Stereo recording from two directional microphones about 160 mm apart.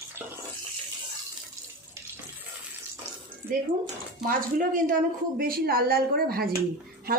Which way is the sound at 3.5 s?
65° right (ahead or behind).